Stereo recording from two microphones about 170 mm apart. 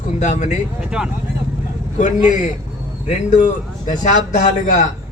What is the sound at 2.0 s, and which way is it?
A man's voice, 45° left (ahead or behind).